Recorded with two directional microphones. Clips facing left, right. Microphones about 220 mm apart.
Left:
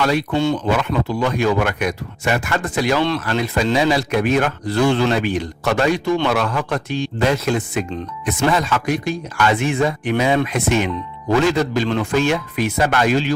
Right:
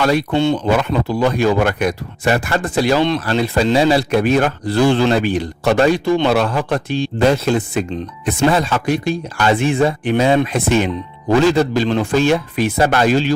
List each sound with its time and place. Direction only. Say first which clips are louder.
0.0 s speech: right 3 dB; 40° right (ahead or behind)
0.3 s speech: right 3 dB; 25° right (ahead or behind)